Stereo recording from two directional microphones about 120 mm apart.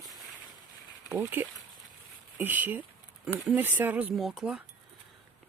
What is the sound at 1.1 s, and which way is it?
Speech, 15° right (ahead or behind).